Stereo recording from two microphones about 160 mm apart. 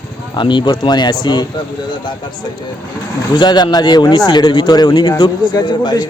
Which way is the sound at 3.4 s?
30° left (ahead or behind).